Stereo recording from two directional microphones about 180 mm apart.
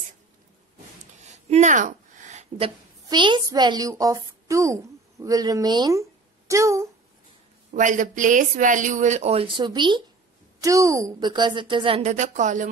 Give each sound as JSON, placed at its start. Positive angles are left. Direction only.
{"t": 1.2, "sound": "a sound", "side_deg": -40}
{"t": 3.1, "sound": "a woman's voice", "side_deg": -25}
{"t": 7.7, "sound": "a woman's voice", "side_deg": -45}